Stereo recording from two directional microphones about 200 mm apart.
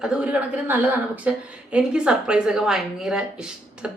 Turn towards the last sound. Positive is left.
turn(degrees=-5)  # may be behind; listen again after turning